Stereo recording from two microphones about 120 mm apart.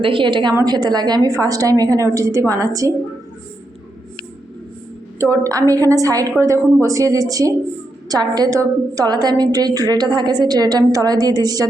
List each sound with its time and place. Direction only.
0.0 s a woman's voice: 45° right (ahead or behind); by 2.9 s 30° right (ahead or behind)
5.2 s a woman's voice: 25° right (ahead or behind)